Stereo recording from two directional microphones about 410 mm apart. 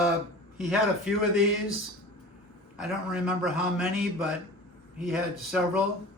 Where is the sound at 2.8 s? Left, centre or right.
Centre.